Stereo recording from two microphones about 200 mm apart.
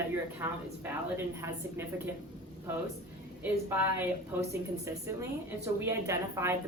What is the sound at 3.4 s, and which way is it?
Speech, 10° right (ahead or behind).